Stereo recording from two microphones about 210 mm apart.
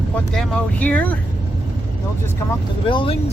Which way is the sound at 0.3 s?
5° left (ahead or behind).